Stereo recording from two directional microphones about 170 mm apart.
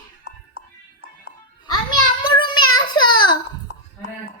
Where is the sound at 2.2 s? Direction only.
25° left (ahead or behind).